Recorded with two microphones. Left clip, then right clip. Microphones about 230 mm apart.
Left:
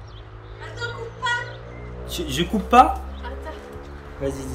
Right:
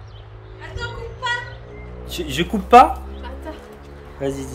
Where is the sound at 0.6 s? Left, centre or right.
Right.